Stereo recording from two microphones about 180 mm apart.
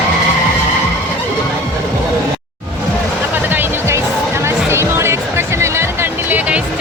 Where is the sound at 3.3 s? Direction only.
10° right (ahead or behind).